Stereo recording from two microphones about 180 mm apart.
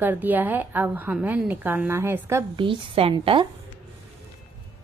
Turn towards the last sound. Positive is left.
turn(degrees=-30)  # may be behind; listen again after turning